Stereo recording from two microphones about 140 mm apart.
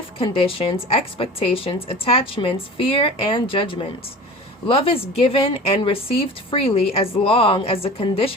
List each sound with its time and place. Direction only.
0.2 s a woman's voice: 40° left (ahead or behind)